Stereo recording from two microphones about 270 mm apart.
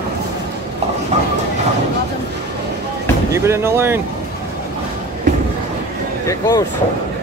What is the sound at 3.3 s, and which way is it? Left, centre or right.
Speech, centre.